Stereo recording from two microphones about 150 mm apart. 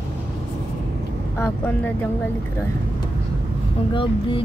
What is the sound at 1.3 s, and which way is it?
Speech, 15° left (ahead or behind).